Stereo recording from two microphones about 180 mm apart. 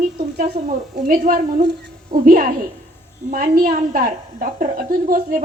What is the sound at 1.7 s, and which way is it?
Speech, 70° right (ahead or behind).